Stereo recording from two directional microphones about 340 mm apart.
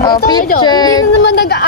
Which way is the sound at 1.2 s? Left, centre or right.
Left.